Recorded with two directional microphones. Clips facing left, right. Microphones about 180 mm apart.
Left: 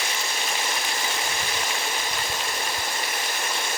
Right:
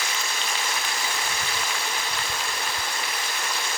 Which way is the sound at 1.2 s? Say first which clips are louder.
Left 1 dB; 15° left (ahead or behind).